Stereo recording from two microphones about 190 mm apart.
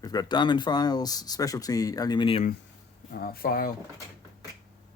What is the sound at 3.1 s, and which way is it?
Speech, 50° left (ahead or behind).